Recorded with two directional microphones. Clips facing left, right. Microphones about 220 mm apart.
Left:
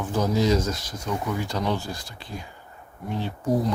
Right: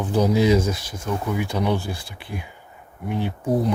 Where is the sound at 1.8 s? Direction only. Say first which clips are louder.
Right 3 dB; 60° right (ahead or behind).